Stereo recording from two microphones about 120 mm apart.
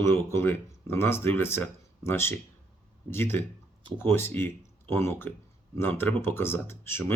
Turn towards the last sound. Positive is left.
turn(degrees=20)  # may be behind; listen again after turning